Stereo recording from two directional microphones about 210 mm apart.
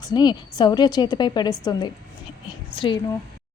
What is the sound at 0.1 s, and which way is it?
A woman's voice, 20° left (ahead or behind).